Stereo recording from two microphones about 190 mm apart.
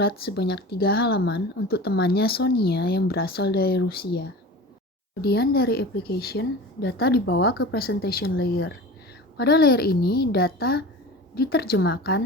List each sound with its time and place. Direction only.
0.0 s speech: 55° left (ahead or behind)